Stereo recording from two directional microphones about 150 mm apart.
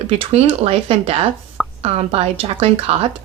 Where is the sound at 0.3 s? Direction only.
40° right (ahead or behind).